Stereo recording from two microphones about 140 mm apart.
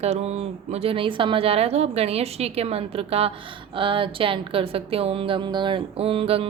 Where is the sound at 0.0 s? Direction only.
50° right (ahead or behind).